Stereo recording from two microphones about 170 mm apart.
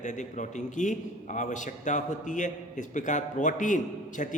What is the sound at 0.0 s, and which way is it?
A man's voice, 45° left (ahead or behind).